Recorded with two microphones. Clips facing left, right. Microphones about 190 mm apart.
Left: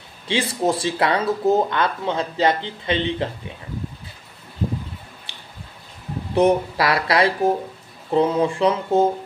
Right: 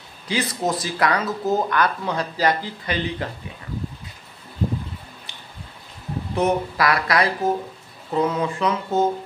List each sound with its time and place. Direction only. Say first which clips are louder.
0.3 s speech: left 3 dB; 30° left (ahead or behind)
6.3 s speech: left 4 dB; 30° left (ahead or behind)